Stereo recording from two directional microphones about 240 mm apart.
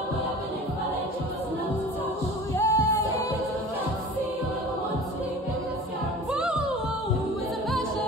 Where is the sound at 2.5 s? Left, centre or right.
Centre.